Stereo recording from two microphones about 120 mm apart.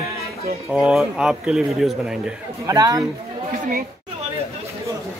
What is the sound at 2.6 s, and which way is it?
Speech, 30° right (ahead or behind).